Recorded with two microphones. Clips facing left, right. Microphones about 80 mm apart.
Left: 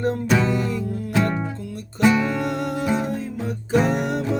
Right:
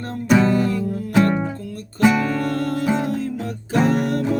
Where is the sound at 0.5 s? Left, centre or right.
Centre.